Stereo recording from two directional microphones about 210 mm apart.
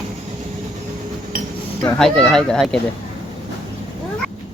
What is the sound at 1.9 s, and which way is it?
Speech, 5° left (ahead or behind).